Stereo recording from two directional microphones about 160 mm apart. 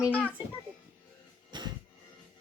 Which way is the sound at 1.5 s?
25° right (ahead or behind).